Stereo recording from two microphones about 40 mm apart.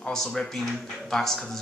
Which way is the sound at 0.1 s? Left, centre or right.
Centre.